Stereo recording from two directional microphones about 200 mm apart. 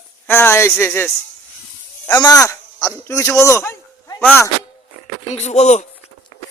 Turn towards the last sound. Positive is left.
turn(degrees=35)  # may be behind; listen again after turning